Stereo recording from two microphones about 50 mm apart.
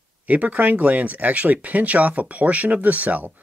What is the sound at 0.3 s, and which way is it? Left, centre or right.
Speech, right.